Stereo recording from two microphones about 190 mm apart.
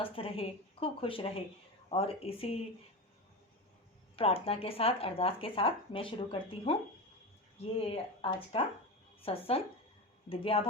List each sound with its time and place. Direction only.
0.0 s speech: 30° left (ahead or behind)
4.1 s speech: 30° left (ahead or behind)